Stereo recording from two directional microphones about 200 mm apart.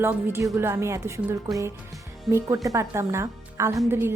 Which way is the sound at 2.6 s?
15° right (ahead or behind).